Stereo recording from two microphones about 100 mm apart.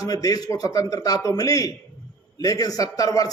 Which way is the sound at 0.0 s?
40° left (ahead or behind).